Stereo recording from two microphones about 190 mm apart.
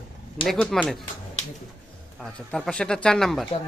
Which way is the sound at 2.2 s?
5° left (ahead or behind).